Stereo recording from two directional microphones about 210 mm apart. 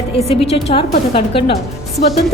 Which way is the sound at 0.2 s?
30° left (ahead or behind).